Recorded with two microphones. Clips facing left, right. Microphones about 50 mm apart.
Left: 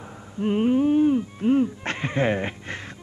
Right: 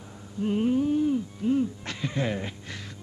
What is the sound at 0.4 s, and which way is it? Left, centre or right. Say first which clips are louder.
Speech: left 4 dB; left.